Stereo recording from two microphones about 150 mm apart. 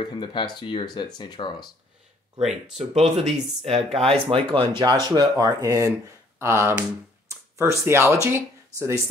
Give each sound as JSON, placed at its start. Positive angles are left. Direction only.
{"t": 0.0, "sound": "speech", "side_deg": 30}
{"t": 2.3, "sound": "speech", "side_deg": -45}